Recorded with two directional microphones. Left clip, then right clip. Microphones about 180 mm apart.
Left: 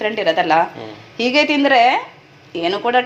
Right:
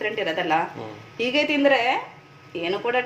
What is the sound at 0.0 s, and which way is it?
Speech, 40° left (ahead or behind).